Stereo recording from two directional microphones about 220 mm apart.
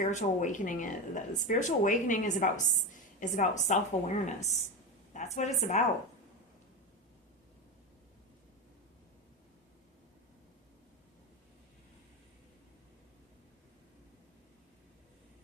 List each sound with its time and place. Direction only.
0.0 s speech: 35° left (ahead or behind)